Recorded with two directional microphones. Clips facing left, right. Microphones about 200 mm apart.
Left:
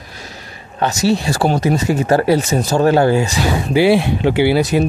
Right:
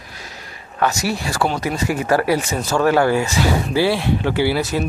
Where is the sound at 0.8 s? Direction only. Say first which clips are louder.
Left 5 dB; 25° left (ahead or behind).